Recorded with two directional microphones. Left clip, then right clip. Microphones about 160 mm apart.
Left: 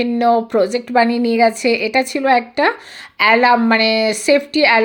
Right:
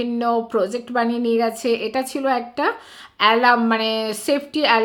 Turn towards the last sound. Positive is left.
turn(degrees=20)  # may be behind; listen again after turning